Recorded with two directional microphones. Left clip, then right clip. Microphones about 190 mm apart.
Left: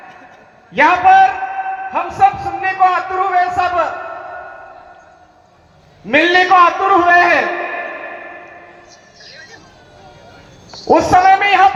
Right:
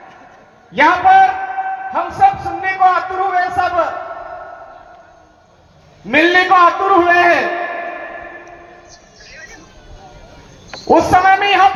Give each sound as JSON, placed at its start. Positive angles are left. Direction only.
{"t": 0.7, "sound": "a man's voice", "side_deg": 15}
{"t": 6.1, "sound": "a man's voice", "side_deg": 20}
{"t": 9.2, "sound": "a sound", "side_deg": 35}
{"t": 10.8, "sound": "a man's voice", "side_deg": 15}